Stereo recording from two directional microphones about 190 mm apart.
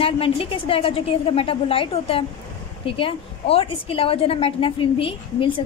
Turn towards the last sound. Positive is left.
turn(degrees=25)  # may be behind; listen again after turning